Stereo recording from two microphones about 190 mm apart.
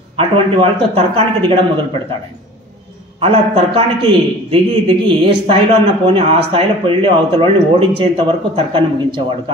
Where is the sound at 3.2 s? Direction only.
30° right (ahead or behind).